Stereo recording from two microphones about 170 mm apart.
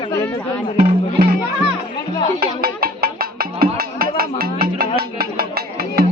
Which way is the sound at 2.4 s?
60° right (ahead or behind).